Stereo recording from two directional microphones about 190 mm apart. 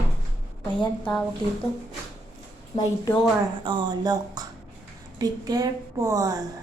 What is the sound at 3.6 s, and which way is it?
A woman's voice, 25° right (ahead or behind).